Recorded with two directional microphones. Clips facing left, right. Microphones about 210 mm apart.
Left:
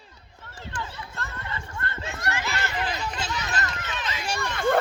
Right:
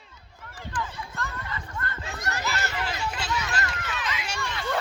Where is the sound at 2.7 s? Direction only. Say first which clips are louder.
Left 2 dB; 15° left (ahead or behind).